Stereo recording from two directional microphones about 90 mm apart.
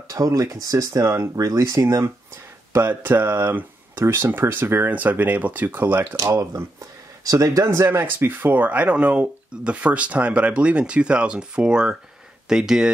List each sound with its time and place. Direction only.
0.1 s speech: 40° right (ahead or behind); by 6.0 s 20° right (ahead or behind)
6.1 s speech: 35° right (ahead or behind); by 12.9 s 5° right (ahead or behind)